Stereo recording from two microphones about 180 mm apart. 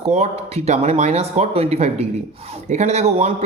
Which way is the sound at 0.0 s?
35° right (ahead or behind).